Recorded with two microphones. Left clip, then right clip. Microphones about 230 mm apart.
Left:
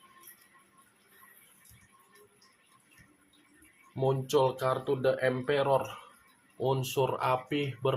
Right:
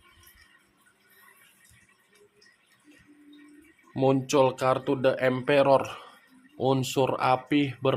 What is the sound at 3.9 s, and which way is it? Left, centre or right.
Speech, right.